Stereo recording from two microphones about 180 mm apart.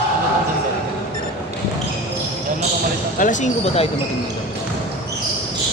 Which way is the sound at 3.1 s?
45° left (ahead or behind).